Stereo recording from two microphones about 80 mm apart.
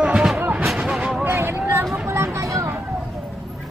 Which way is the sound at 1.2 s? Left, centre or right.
Right.